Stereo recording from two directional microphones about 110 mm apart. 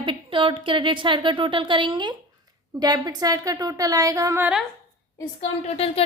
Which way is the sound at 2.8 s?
35° right (ahead or behind).